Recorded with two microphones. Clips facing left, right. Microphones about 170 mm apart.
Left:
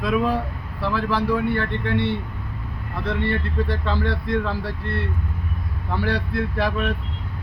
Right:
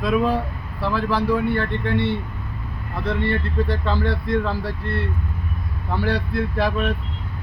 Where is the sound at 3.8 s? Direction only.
40° right (ahead or behind).